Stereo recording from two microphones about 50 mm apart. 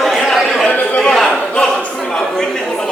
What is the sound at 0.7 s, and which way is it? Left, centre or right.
Speech, left.